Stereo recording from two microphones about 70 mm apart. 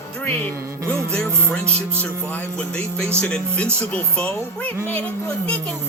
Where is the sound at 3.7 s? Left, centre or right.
Centre.